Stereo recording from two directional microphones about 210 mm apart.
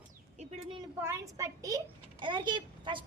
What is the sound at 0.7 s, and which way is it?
A child's voice, 15° right (ahead or behind).